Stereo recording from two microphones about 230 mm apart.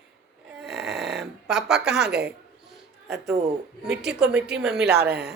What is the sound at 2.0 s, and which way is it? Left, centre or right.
Speech, right.